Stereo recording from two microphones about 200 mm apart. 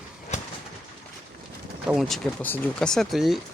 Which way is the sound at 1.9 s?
Centre (ahead or behind).